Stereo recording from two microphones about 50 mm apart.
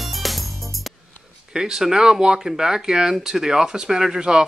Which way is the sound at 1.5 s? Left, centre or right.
Centre.